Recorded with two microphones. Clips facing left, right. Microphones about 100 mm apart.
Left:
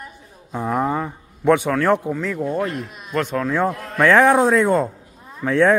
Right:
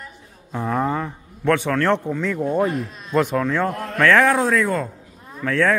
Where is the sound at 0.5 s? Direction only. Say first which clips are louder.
Left 1 dB; 15° left (ahead or behind); by 3.4 s 10° right (ahead or behind).